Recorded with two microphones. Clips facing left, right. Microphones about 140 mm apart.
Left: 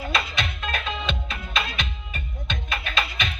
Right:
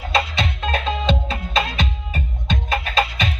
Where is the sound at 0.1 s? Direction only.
35° right (ahead or behind).